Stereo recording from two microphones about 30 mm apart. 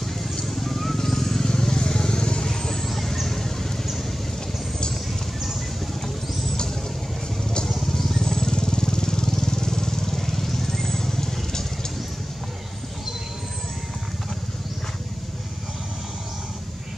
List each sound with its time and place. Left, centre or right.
0.6 s vehicle: centre
1.4 s vehicle: left
2.8 s vehicle: centre
7.6 s vehicle: centre
8.3 s vehicle: left